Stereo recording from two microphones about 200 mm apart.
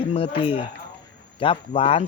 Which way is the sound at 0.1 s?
30° left (ahead or behind).